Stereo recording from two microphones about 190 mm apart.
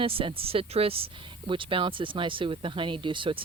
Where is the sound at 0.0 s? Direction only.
30° right (ahead or behind).